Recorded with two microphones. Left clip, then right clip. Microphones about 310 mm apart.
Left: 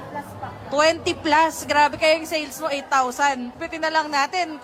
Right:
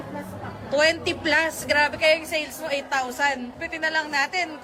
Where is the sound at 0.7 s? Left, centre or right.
Centre.